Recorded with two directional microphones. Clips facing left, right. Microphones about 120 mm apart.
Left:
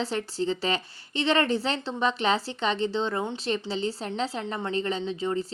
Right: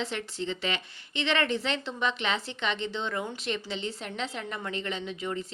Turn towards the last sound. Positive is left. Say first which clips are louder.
# left 5 dB
turn(degrees=30)  # may be behind; listen again after turning